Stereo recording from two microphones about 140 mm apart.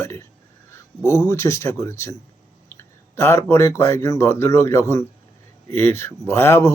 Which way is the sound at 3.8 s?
20° left (ahead or behind).